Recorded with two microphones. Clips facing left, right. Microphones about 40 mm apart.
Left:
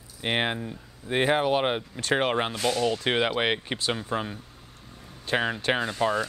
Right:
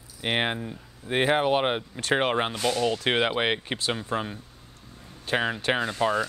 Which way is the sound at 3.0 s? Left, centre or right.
Right.